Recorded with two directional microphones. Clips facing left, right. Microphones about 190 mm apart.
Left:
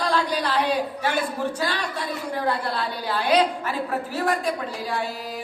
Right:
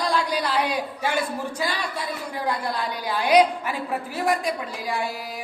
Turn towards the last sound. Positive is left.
turn(degrees=-10)  # may be behind; listen again after turning